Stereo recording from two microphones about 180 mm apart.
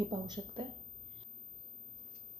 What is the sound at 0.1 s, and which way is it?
Speech, 25° right (ahead or behind).